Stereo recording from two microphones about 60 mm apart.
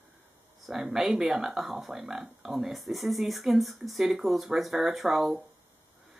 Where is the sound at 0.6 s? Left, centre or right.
Centre.